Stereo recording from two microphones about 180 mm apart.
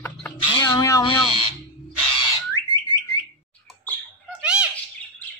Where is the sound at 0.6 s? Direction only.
20° left (ahead or behind).